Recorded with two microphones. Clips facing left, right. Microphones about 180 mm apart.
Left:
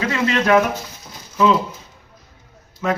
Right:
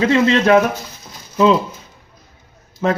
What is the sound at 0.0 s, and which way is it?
Speech, 25° right (ahead or behind).